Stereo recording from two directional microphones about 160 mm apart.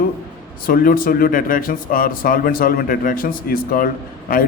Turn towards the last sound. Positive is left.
turn(degrees=60)  # may be behind; listen again after turning